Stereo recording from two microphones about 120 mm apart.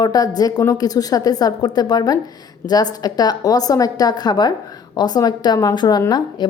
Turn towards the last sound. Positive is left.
turn(degrees=35)  # may be behind; listen again after turning